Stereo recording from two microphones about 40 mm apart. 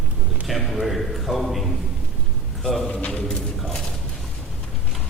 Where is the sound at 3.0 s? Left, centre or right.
Left.